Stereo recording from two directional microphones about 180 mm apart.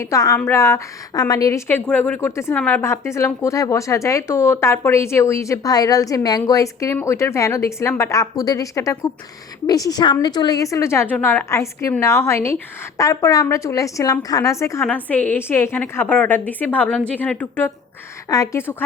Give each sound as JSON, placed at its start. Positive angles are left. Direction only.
{"t": 0.1, "sound": "a woman's voice", "side_deg": 20}